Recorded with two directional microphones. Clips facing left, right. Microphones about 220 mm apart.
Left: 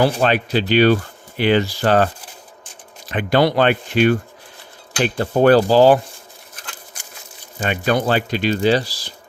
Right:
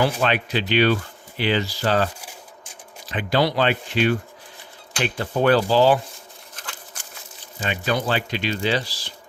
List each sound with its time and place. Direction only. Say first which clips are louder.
0.0 s speech: left 4 dB; 40° left (ahead or behind)
1.4 s speech: left 6 dB; 50° left (ahead or behind)
3.1 s speech: left 5 dB; 55° left (ahead or behind)
7.6 s speech: left 5 dB; 55° left (ahead or behind); by 9.1 s 40° left (ahead or behind)